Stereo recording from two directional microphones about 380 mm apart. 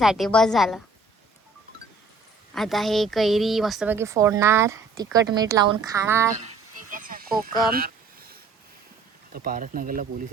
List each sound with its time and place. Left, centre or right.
0.0 s a woman's voice: centre
2.6 s a woman's voice: centre
6.9 s a sound: right
9.3 s speech: right